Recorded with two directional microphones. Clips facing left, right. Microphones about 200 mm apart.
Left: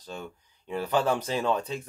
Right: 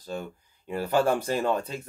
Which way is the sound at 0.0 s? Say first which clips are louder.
Right 4 dB; 45° right (ahead or behind).